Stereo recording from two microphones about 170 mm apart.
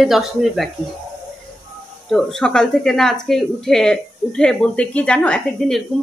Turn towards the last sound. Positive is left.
turn(degrees=5)  # may be behind; listen again after turning